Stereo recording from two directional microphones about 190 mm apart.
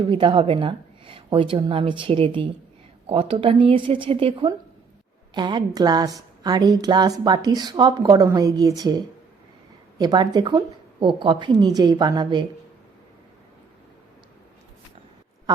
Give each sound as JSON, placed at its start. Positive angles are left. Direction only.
{"t": 0.1, "sound": "a woman's voice", "side_deg": -25}
{"t": 10.0, "sound": "a woman's voice", "side_deg": -20}